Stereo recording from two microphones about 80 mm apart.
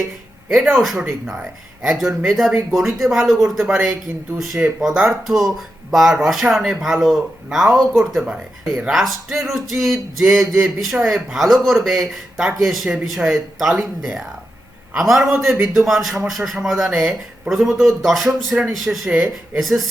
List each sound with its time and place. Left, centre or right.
0.4 s speech: centre
0.7 s speech: centre